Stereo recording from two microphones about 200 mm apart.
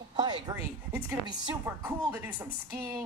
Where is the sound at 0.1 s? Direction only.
20° right (ahead or behind).